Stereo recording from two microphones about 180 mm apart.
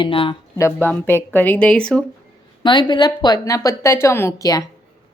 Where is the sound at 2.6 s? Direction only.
25° left (ahead or behind).